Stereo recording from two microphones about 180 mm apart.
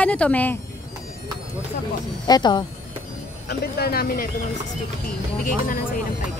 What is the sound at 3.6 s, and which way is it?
Speech, 60° left (ahead or behind).